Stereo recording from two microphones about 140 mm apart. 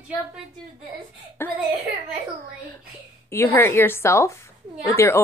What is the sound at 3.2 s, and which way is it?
A woman's voice, 15° left (ahead or behind).